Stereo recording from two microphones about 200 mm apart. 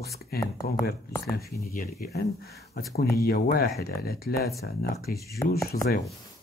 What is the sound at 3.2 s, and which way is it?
Speech, 50° left (ahead or behind).